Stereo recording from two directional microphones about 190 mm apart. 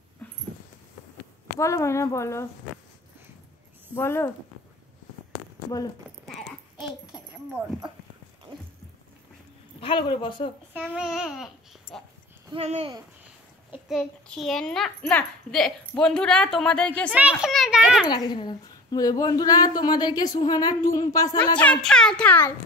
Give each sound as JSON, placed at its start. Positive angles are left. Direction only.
{"t": 0.2, "sound": "dog", "side_deg": 10}
{"t": 1.6, "sound": "a child's voice", "side_deg": 15}
{"t": 3.9, "sound": "a child's voice", "side_deg": 10}
{"t": 6.0, "sound": "a sound", "side_deg": 0}
{"t": 9.8, "sound": "speech", "side_deg": 25}
{"t": 10.7, "sound": "speech", "side_deg": -5}
{"t": 12.5, "sound": "speech", "side_deg": -30}
{"t": 13.8, "sound": "a child's voice", "side_deg": 5}
{"t": 17.1, "sound": "a child's voice", "side_deg": -5}
{"t": 18.0, "sound": "speech", "side_deg": 20}
{"t": 21.5, "sound": "a child's voice", "side_deg": 5}